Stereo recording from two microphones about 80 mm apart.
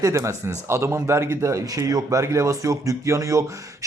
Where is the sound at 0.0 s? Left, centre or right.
Right.